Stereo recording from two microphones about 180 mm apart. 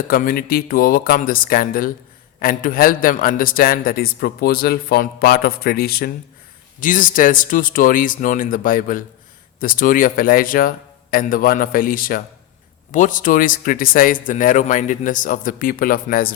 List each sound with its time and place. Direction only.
0.1 s a man's voice: 55° left (ahead or behind)